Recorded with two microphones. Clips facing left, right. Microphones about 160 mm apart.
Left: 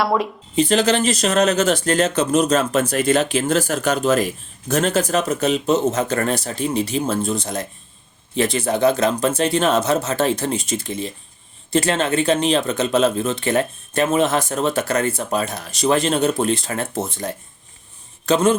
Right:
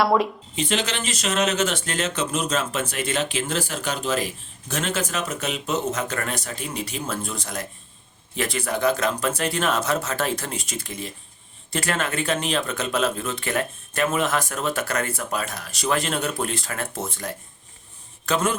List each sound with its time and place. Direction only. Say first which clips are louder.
0.0 s speech: even; centre (ahead or behind)
0.5 s speech: left 10 dB; 40° left (ahead or behind)